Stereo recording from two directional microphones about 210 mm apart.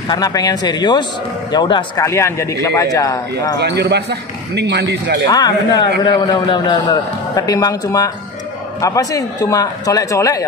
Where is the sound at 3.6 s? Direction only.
50° right (ahead or behind).